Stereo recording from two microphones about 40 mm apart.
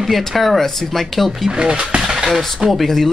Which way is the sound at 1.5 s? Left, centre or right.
Right.